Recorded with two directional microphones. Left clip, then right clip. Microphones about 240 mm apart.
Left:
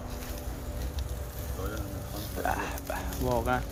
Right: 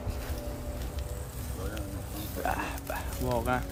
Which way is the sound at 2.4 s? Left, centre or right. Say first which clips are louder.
Left 1 dB; centre.